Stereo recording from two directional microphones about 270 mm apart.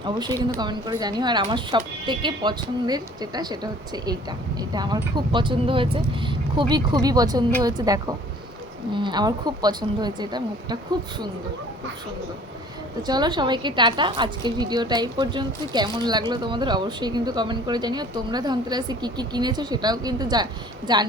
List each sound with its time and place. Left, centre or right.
0.0 s a woman's voice: centre
13.0 s a woman's voice: centre